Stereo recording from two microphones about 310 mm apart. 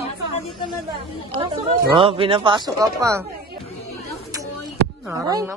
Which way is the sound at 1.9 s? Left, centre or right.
Centre.